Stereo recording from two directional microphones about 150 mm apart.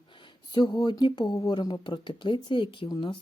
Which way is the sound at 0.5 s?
30° left (ahead or behind).